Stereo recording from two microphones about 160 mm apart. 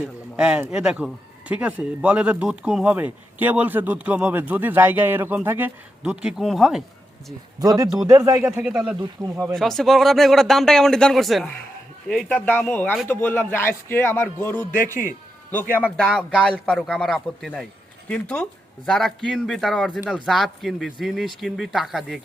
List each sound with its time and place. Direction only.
0.3 s speech: 5° right (ahead or behind)
7.6 s speech: 25° right (ahead or behind)
8.4 s a man's voice: 5° right (ahead or behind); by 14.7 s 10° left (ahead or behind)
14.8 s speech: 15° right (ahead or behind)
16.0 s a man's voice: 5° left (ahead or behind)